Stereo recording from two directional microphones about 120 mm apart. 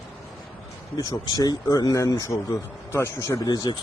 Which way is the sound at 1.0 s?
35° left (ahead or behind).